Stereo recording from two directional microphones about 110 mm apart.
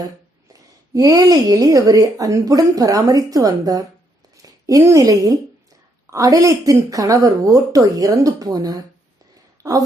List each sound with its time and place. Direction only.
0.9 s a woman's voice: 30° right (ahead or behind)
4.4 s a sound: 30° right (ahead or behind)
4.8 s a woman's voice: 25° right (ahead or behind)